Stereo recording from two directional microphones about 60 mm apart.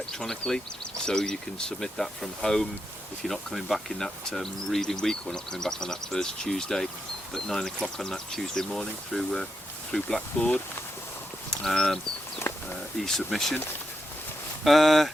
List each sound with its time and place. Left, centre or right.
0.1 s speech: centre
13.0 s speech: centre
14.6 s speech: centre